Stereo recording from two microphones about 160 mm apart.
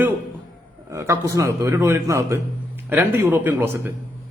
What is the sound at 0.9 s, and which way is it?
A man's voice, 20° right (ahead or behind).